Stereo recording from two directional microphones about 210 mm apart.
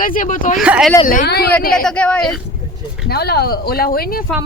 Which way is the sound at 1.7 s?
5° left (ahead or behind).